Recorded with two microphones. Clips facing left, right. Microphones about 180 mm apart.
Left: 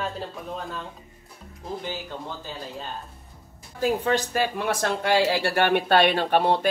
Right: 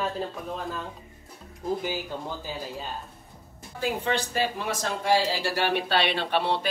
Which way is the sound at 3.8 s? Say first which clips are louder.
Left 4 dB; 40° left (ahead or behind).